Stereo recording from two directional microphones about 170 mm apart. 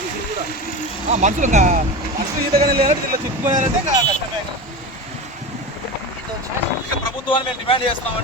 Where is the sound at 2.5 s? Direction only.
60° right (ahead or behind).